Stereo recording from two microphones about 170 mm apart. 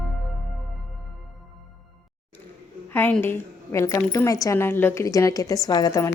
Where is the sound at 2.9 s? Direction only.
10° left (ahead or behind).